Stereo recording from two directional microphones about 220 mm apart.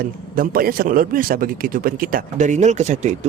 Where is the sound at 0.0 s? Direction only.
40° right (ahead or behind).